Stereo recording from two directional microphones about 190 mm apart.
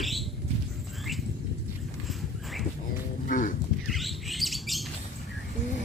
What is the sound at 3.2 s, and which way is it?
Livestock, 45° left (ahead or behind).